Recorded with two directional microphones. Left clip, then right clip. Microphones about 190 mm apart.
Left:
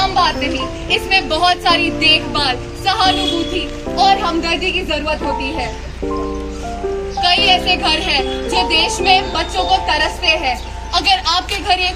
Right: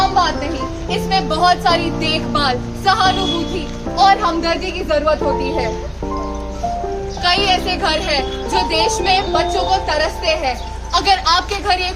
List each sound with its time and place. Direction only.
0.9 s speech: 15° right (ahead or behind)
7.2 s speech: 15° right (ahead or behind)